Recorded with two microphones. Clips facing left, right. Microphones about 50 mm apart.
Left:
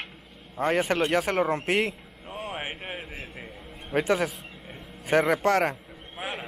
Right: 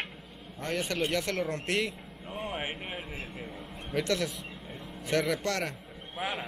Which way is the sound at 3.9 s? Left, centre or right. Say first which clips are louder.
Left 5 dB; left.